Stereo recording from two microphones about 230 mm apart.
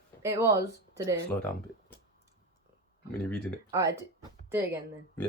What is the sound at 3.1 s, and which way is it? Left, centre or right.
Speech, centre.